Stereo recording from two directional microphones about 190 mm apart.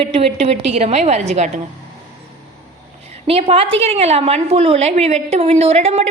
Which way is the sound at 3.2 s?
30° right (ahead or behind).